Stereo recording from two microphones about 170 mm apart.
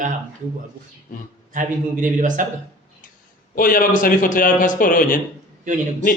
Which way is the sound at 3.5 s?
55° left (ahead or behind).